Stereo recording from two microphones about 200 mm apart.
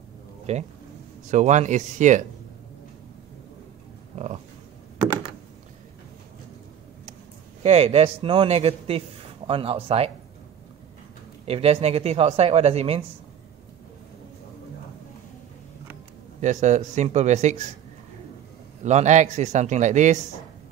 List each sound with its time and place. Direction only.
0.5 s speech: 35° right (ahead or behind)
4.1 s speech: 35° right (ahead or behind)
7.6 s speech: 30° right (ahead or behind)
11.4 s speech: 30° right (ahead or behind)
16.3 s speech: 35° right (ahead or behind)
18.8 s speech: 35° right (ahead or behind)